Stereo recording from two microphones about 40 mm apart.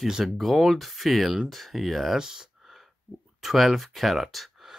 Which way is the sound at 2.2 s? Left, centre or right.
Centre.